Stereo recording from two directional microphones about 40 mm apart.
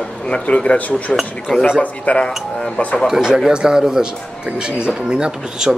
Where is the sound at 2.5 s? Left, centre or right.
Centre.